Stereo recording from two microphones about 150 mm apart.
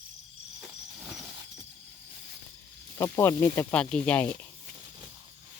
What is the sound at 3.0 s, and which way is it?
Speech, 15° left (ahead or behind).